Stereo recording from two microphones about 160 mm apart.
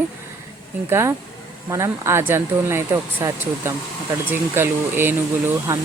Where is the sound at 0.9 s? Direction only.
15° right (ahead or behind).